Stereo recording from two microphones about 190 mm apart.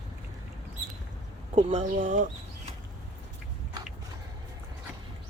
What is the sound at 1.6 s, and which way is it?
Speech, 35° right (ahead or behind).